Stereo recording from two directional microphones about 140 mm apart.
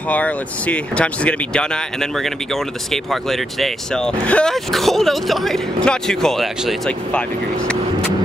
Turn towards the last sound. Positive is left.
turn(degrees=0)  # may be behind; listen again after turning